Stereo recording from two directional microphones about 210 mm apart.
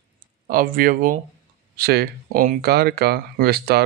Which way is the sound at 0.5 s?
45° right (ahead or behind).